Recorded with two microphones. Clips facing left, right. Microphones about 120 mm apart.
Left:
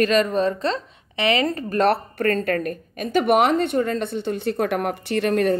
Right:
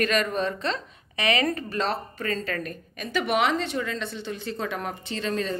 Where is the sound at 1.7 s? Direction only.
60° left (ahead or behind).